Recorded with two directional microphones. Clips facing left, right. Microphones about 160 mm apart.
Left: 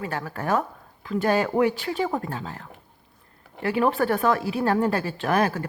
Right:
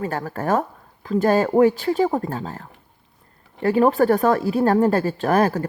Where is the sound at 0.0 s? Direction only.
40° right (ahead or behind).